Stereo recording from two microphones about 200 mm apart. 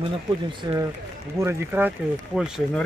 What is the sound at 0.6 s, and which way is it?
Speech, 20° right (ahead or behind).